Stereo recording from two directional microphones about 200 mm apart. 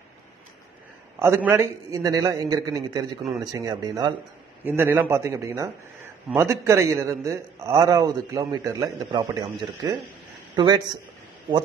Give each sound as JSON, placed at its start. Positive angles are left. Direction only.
{"t": 1.2, "sound": "a man's voice", "side_deg": -10}